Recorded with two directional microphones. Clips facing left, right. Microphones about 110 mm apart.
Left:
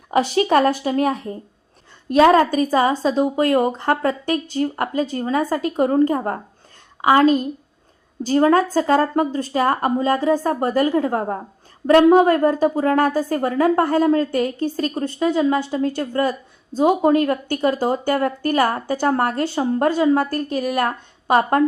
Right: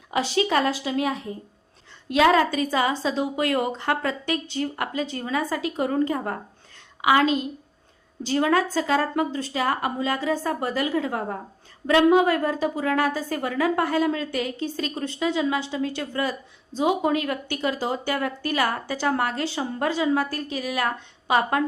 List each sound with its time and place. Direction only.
0.1 s a woman's voice: 45° left (ahead or behind)